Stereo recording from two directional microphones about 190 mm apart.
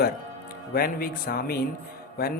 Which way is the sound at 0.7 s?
50° left (ahead or behind).